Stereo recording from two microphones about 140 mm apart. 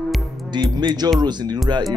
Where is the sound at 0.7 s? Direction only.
30° right (ahead or behind).